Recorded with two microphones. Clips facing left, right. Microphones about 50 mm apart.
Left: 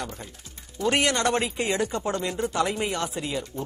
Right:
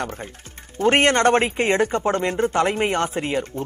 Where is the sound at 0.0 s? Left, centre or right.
Right.